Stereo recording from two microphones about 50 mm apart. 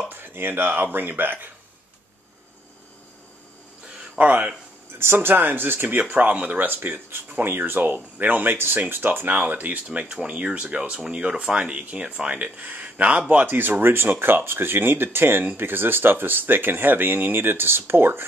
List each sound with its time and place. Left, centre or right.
0.1 s speech: right
4.2 s speech: right
4.9 s speech: right
9.8 s speech: right
12.3 s speech: right